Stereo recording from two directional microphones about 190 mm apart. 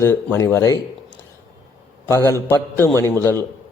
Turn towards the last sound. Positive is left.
turn(degrees=15)  # may be behind; listen again after turning